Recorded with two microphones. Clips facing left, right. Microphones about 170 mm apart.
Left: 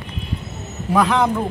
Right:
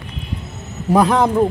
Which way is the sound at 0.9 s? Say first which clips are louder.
Right 3 dB; 40° right (ahead or behind).